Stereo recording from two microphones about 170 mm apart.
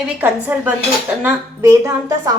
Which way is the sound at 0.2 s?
10° right (ahead or behind).